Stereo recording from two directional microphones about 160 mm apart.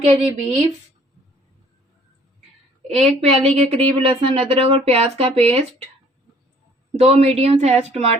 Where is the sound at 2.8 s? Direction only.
40° right (ahead or behind).